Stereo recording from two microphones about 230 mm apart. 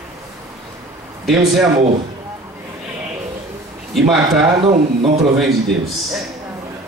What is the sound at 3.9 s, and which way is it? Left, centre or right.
Speech, centre.